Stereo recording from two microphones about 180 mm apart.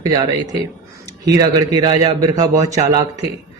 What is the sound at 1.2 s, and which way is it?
Speech, 20° right (ahead or behind).